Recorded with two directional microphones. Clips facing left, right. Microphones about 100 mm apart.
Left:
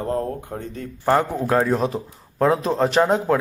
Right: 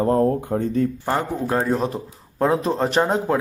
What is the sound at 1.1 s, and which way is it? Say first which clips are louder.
A man's voice: left 3 dB; centre (ahead or behind).